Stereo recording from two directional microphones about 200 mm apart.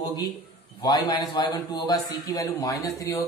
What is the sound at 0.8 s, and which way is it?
A man's voice, 20° left (ahead or behind).